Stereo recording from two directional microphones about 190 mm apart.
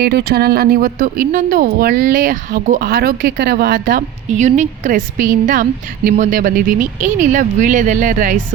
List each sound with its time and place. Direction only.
0.0 s speech: 60° right (ahead or behind)